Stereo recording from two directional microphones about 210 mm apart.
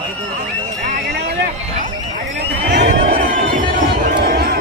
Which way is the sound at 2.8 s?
35° right (ahead or behind).